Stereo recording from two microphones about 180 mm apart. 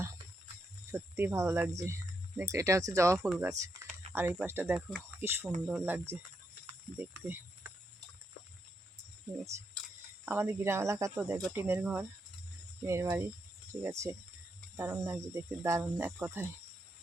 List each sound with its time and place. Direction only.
0.9 s speech: 15° right (ahead or behind)
3.2 s speech: 5° right (ahead or behind)
3.5 s speech: 15° right (ahead or behind)
9.4 s speech: 15° right (ahead or behind)